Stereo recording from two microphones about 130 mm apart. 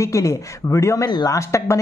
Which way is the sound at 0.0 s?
25° left (ahead or behind).